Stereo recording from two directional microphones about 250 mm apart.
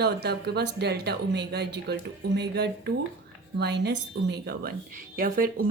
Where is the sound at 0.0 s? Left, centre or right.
Right.